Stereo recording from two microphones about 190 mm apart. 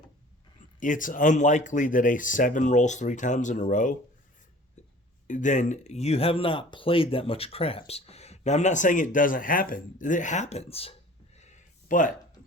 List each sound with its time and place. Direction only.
0.8 s speech: 45° left (ahead or behind)
5.3 s speech: 40° left (ahead or behind)
11.3 s a sound: 40° left (ahead or behind)